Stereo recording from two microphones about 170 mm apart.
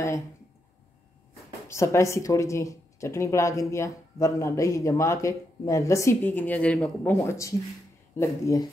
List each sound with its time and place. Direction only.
1.7 s speech: 15° left (ahead or behind)